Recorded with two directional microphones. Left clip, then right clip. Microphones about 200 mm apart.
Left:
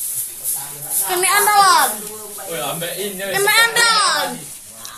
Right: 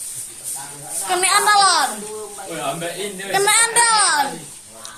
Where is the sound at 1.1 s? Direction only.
40° right (ahead or behind).